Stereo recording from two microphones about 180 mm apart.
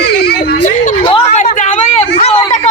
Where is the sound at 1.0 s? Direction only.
30° left (ahead or behind).